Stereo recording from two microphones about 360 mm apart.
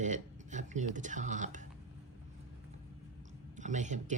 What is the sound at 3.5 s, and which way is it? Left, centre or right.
Speech, centre.